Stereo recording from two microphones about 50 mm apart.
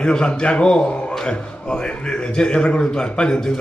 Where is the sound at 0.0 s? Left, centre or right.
Centre.